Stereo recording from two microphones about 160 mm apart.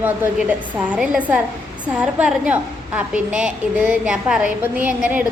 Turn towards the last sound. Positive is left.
turn(degrees=-10)  # may be behind; listen again after turning